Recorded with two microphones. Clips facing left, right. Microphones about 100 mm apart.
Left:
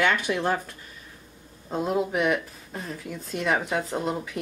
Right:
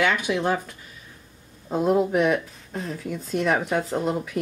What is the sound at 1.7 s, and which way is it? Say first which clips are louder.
Speech: right 5 dB; centre (ahead or behind).